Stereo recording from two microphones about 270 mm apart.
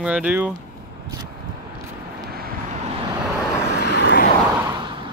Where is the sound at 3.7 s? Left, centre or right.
Left.